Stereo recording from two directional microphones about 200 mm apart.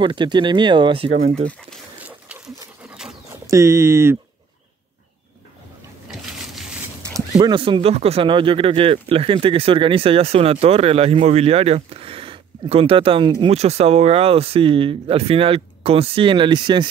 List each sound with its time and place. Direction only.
0.0 s speech: 25° right (ahead or behind)
2.9 s dog: 5° right (ahead or behind)
3.4 s speech: 15° right (ahead or behind)
6.0 s a sound: 5° right (ahead or behind)
7.3 s speech: 25° right (ahead or behind)